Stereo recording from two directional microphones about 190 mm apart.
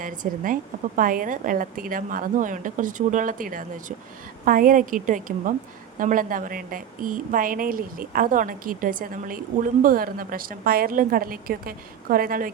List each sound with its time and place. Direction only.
0.0 s a woman's voice: 45° right (ahead or behind)